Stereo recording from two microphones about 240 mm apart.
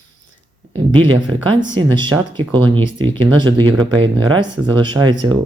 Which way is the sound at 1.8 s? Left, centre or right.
Centre.